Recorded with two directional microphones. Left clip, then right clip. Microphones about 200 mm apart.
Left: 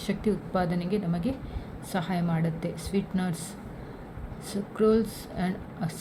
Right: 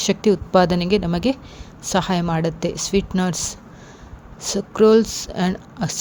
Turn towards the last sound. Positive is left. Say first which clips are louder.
# right 9 dB
turn(degrees=-45)  # may be behind; listen again after turning